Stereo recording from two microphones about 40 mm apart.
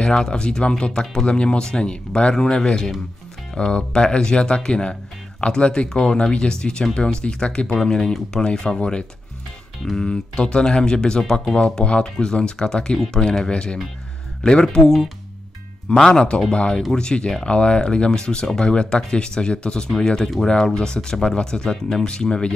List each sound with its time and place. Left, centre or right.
0.0 s speech: left
16.0 s speech: centre
22.0 s speech: left